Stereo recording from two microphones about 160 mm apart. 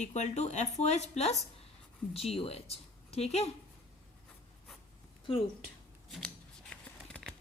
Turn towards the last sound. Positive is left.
turn(degrees=5)  # may be behind; listen again after turning